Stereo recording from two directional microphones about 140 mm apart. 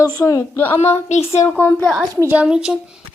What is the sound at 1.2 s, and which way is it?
Speech, 20° left (ahead or behind).